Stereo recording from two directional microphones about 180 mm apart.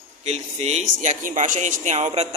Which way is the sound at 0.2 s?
40° right (ahead or behind).